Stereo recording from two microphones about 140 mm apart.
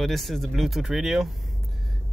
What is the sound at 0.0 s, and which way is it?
Speech, centre (ahead or behind).